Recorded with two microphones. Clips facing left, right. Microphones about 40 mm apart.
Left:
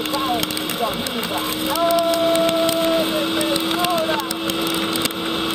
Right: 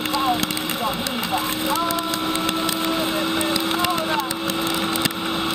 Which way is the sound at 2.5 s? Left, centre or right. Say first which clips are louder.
Left 5 dB; left.